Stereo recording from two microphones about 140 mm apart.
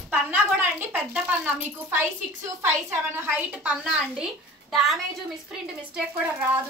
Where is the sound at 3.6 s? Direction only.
5° right (ahead or behind).